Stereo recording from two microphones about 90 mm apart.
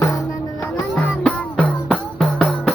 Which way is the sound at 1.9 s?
5° left (ahead or behind).